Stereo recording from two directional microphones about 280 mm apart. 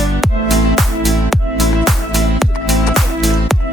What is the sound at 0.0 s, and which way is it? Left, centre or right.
Music, centre.